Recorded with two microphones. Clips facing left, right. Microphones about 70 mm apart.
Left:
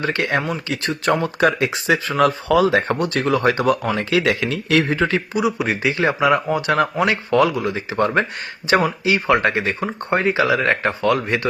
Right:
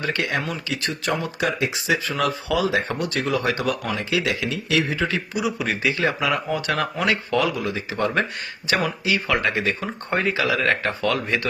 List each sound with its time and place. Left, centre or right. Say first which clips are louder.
0.0 s speech: left 4 dB; left
1.0 s speech: left 8 dB; left
2.0 s speech: left 6 dB; left
4.1 s speech: left 5 dB; left